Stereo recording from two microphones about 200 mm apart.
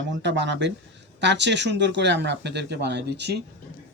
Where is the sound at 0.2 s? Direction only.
65° right (ahead or behind).